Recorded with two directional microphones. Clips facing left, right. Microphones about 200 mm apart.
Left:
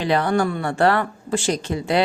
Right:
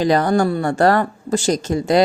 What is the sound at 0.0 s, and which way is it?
Speech, 40° right (ahead or behind).